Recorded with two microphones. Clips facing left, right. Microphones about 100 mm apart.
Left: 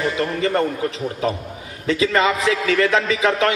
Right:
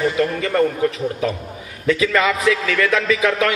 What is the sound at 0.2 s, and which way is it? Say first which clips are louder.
Speech: right 1 dB; 30° left (ahead or behind).